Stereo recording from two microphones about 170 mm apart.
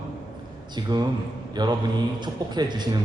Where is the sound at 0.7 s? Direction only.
25° right (ahead or behind).